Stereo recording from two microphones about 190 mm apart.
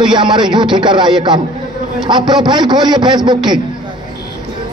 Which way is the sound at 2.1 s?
25° right (ahead or behind).